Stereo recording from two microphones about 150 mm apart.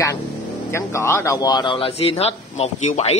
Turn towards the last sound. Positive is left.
turn(degrees=45)  # may be behind; listen again after turning